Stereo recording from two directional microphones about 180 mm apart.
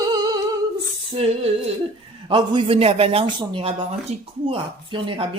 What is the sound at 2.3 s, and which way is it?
Speech, 30° right (ahead or behind).